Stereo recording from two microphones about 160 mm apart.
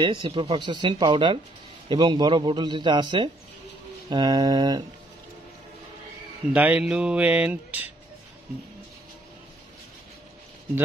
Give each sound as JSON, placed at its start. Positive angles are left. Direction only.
{"t": 0.0, "sound": "speech", "side_deg": -30}
{"t": 6.5, "sound": "speech", "side_deg": -10}